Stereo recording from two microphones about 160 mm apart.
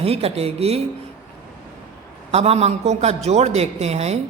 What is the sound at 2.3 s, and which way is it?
A man's voice, 40° right (ahead or behind).